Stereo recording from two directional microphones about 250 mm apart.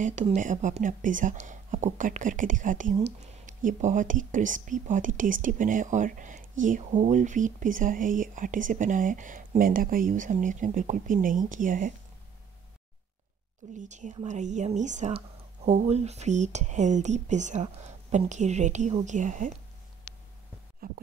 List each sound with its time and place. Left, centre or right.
0.0 s a woman's voice: right
13.7 s a woman's voice: right
20.8 s a woman's voice: right